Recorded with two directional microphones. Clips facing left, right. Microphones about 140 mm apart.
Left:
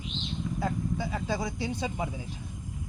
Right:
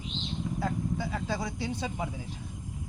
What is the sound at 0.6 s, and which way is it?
Speech, 15° left (ahead or behind).